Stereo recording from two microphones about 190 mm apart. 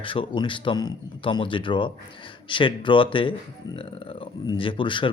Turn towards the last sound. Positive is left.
turn(degrees=25)  # may be behind; listen again after turning